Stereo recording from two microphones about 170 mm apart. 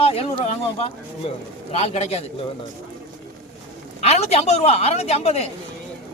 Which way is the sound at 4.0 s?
40° left (ahead or behind).